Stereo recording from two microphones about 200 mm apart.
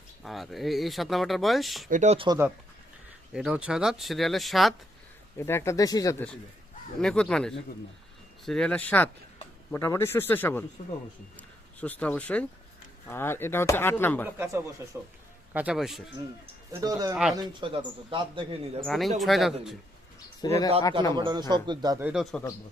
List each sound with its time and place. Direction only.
0.2 s speech: centre (ahead or behind)
1.9 s speech: 35° right (ahead or behind)
3.3 s speech: 5° right (ahead or behind)
5.4 s speech: 15° left (ahead or behind)
7.0 s speech: 5° left (ahead or behind)
10.8 s speech: 30° left (ahead or behind)
11.3 s speech: 5° left (ahead or behind)
14.3 s speech: 15° right (ahead or behind)
16.7 s speech: 20° right (ahead or behind)
18.9 s speech: centre (ahead or behind)
20.4 s speech: 20° left (ahead or behind)
21.1 s speech: 20° right (ahead or behind)
22.0 s speech: centre (ahead or behind)